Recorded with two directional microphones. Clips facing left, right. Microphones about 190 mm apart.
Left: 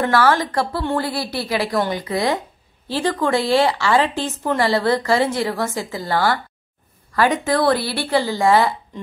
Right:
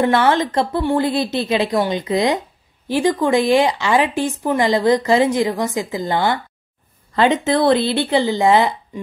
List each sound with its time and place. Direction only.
0.0 s a woman's voice: 20° right (ahead or behind)